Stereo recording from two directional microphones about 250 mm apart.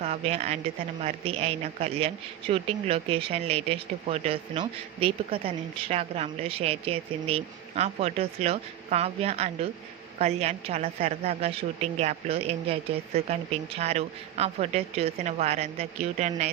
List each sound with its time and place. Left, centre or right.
0.0 s a woman's voice: right